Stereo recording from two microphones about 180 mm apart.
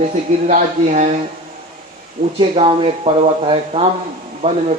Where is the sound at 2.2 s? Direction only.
30° right (ahead or behind).